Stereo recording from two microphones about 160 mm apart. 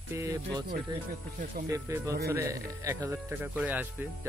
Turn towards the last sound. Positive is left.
turn(degrees=-10)  # may be behind; listen again after turning